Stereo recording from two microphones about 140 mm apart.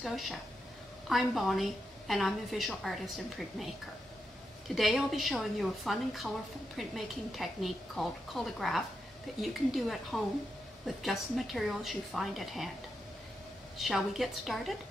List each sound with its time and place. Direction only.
0.0 s a woman's voice: centre (ahead or behind)
4.7 s a woman's voice: centre (ahead or behind)
13.7 s a woman's voice: centre (ahead or behind)